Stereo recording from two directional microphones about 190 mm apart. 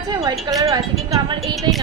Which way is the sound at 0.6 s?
20° right (ahead or behind).